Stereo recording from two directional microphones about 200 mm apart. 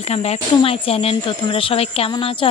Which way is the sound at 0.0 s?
30° left (ahead or behind).